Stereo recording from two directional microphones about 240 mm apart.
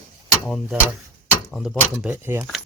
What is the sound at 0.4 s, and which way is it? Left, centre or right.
Speech, centre.